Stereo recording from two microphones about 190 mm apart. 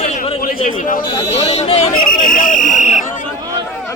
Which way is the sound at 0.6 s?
40° left (ahead or behind).